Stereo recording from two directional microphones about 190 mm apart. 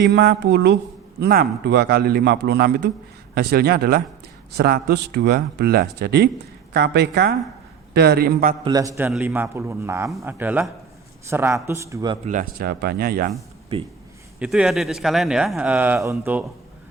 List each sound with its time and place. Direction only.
0.0 s speech: 65° right (ahead or behind)
1.2 s speech: 55° right (ahead or behind)
8.6 s a man's voice: 20° right (ahead or behind)
12.2 s speech: 40° right (ahead or behind)
13.7 s speech: 30° right (ahead or behind)
14.3 s speech: 5° right (ahead or behind)